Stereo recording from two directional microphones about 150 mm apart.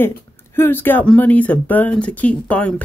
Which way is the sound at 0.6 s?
15° left (ahead or behind).